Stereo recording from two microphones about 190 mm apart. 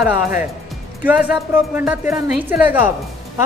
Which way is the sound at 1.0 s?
10° right (ahead or behind).